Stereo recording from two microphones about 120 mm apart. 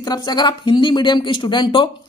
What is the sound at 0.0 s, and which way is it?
Speech, 35° left (ahead or behind).